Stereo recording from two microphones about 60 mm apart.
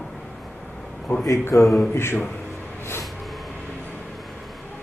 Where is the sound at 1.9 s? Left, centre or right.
Left.